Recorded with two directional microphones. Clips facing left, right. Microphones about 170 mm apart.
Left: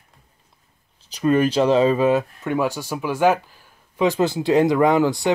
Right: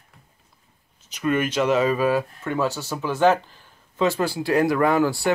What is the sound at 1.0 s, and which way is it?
Speech, 35° left (ahead or behind).